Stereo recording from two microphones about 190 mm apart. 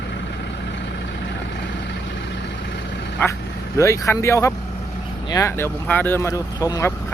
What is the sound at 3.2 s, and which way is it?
Speech, 10° left (ahead or behind).